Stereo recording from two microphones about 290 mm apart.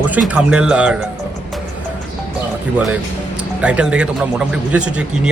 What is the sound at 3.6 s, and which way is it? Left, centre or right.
Speech, centre.